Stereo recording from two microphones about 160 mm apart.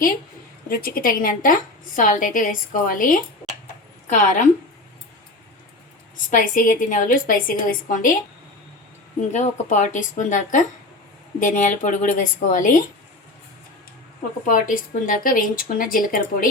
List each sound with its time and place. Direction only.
0.7 s a woman's voice: 65° left (ahead or behind)
6.3 s a woman's voice: 55° left (ahead or behind)
9.3 s a woman's voice: 50° left (ahead or behind)
14.4 s a woman's voice: 60° left (ahead or behind)